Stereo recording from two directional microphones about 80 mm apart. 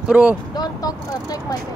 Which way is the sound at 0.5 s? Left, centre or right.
Left.